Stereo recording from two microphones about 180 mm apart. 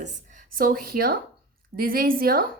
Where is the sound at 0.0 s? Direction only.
40° right (ahead or behind).